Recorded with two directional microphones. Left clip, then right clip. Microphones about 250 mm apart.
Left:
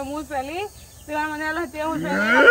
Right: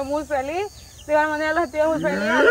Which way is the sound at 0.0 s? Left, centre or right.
Centre.